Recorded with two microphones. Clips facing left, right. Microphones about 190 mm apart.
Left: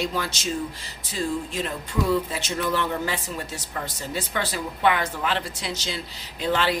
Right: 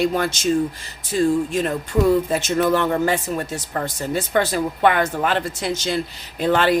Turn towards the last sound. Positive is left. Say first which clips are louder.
# right 6 dB
turn(degrees=-50)  # may be behind; listen again after turning